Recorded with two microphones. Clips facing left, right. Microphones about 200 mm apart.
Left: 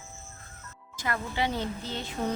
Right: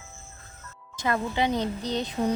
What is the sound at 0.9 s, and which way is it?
Speech, 20° right (ahead or behind).